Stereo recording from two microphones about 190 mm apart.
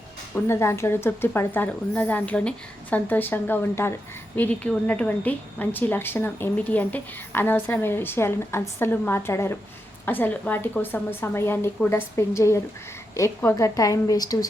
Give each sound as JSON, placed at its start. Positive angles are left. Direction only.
{"t": 0.3, "sound": "a woman's voice", "side_deg": 15}